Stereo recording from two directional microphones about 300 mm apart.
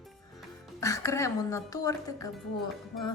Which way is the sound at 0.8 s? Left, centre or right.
Centre.